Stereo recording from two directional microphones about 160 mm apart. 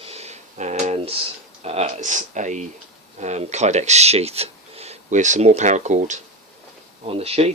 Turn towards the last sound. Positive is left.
turn(degrees=-40)  # may be behind; listen again after turning